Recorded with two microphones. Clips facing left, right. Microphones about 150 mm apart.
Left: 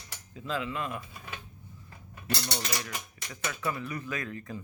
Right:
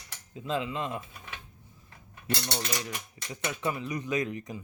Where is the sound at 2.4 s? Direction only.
20° right (ahead or behind).